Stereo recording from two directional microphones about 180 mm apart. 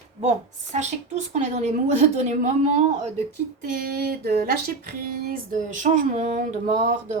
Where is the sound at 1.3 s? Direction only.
40° right (ahead or behind).